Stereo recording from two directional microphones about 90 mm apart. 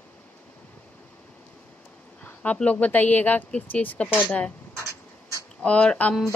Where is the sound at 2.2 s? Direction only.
15° left (ahead or behind).